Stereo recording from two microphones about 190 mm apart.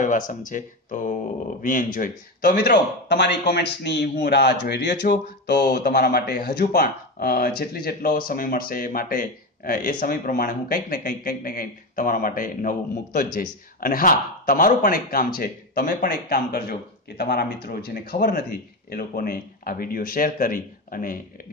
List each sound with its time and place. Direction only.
0.0 s speech: 45° left (ahead or behind); by 5.0 s 60° left (ahead or behind)
5.6 s speech: 45° left (ahead or behind)